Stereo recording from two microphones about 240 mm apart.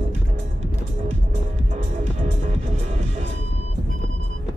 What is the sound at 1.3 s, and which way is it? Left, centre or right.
Music, right.